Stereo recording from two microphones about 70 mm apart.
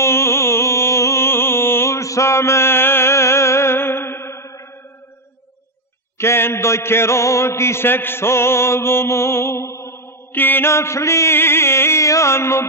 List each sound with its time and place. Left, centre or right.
0.0 s music: left
6.1 s mantra: left
10.3 s mantra: left